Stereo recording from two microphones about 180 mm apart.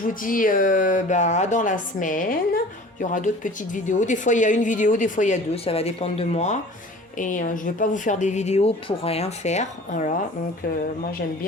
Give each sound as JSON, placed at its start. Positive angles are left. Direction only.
{"t": 0.1, "sound": "a woman's voice", "side_deg": 50}